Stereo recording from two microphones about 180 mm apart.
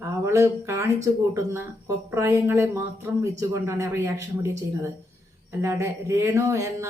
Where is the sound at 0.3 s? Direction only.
15° right (ahead or behind).